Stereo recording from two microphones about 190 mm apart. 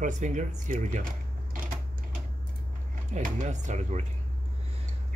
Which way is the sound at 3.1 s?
40° right (ahead or behind).